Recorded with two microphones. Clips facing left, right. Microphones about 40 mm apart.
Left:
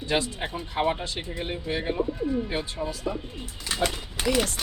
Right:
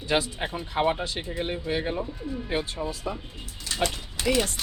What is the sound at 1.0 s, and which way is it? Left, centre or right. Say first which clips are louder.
Speech: right 2 dB; right.